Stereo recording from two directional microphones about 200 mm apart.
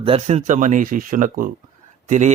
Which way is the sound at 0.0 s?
30° right (ahead or behind).